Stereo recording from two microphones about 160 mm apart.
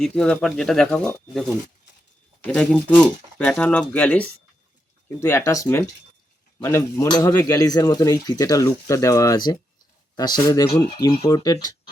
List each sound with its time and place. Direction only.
0.0 s speech: 5° left (ahead or behind); by 11.7 s 25° left (ahead or behind)